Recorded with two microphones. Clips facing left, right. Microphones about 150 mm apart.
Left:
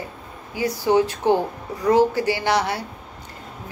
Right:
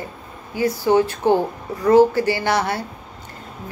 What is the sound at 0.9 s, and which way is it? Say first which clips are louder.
A woman's voice: right 1 dB; 15° left (ahead or behind).